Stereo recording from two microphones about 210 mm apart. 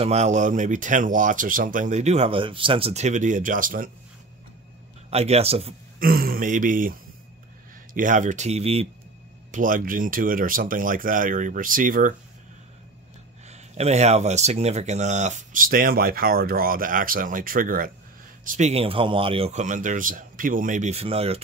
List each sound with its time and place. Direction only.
0.0 s speech: 30° right (ahead or behind)
5.1 s a man's voice: 30° right (ahead or behind)
5.9 s speech: 45° right (ahead or behind)
9.5 s speech: 40° right (ahead or behind)
13.5 s speech: 30° right (ahead or behind)